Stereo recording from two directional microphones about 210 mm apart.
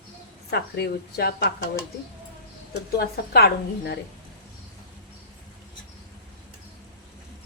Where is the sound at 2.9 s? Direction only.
50° left (ahead or behind).